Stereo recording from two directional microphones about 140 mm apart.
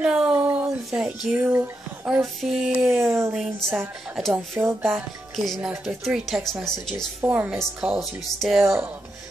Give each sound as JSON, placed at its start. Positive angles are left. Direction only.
{"t": 0.0, "sound": "a sound", "side_deg": -10}
{"t": 0.9, "sound": "speech", "side_deg": 0}
{"t": 3.0, "sound": "speech", "side_deg": -20}
{"t": 4.9, "sound": "speech", "side_deg": 0}
{"t": 7.2, "sound": "speech", "side_deg": -15}
{"t": 7.5, "sound": "speech", "side_deg": 0}
{"t": 8.6, "sound": "speech", "side_deg": -20}